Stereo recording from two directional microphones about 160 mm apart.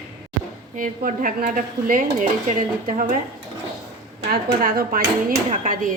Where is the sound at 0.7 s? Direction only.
55° right (ahead or behind).